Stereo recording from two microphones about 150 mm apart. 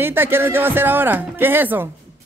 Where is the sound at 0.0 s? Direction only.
15° right (ahead or behind).